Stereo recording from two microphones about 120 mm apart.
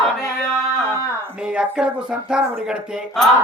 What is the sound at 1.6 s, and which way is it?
Music, 5° right (ahead or behind).